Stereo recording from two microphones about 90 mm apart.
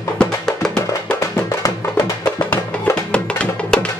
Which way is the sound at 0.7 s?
40° left (ahead or behind).